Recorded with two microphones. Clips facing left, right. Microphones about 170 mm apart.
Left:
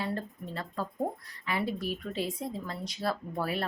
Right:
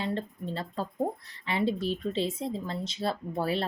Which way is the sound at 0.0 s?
25° right (ahead or behind).